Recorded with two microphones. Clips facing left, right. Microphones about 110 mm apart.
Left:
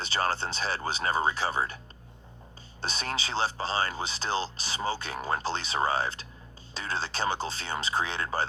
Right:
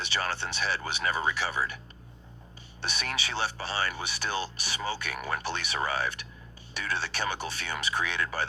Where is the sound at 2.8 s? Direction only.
35° left (ahead or behind).